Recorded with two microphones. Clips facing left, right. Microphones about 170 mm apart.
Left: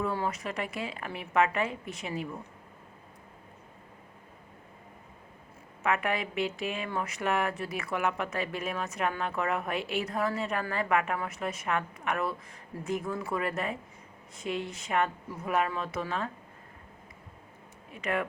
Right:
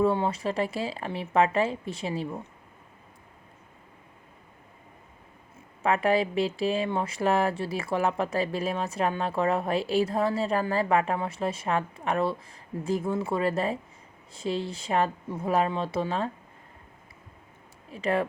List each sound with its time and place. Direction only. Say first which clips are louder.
0.0 s speech: right 7 dB; 30° right (ahead or behind)
5.8 s speech: right 6 dB; 30° right (ahead or behind)
17.9 s speech: right 5 dB; 30° right (ahead or behind)